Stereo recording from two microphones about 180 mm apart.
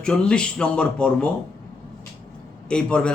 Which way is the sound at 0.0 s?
5° left (ahead or behind).